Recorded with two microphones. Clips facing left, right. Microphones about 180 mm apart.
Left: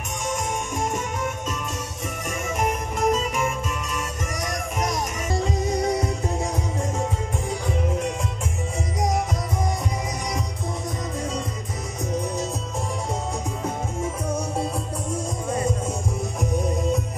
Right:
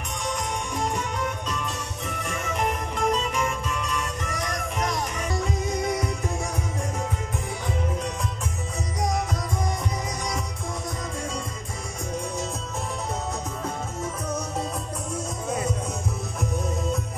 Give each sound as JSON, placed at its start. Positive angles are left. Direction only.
{"t": 0.9, "sound": "music", "side_deg": 20}
{"t": 2.6, "sound": "music", "side_deg": 45}
{"t": 3.3, "sound": "music", "side_deg": 15}